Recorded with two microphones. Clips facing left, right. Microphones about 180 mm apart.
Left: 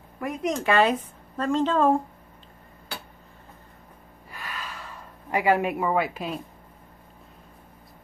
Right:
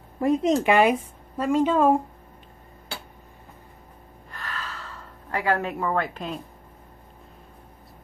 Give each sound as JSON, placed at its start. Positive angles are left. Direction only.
{"t": 0.2, "sound": "speech", "side_deg": -30}
{"t": 0.7, "sound": "a woman's voice", "side_deg": -15}
{"t": 4.3, "sound": "gasp", "side_deg": 10}